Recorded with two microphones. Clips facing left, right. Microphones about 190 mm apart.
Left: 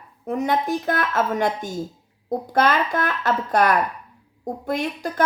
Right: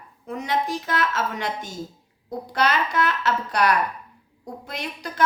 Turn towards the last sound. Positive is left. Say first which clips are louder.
# left 4 dB
turn(degrees=45)  # may be behind; listen again after turning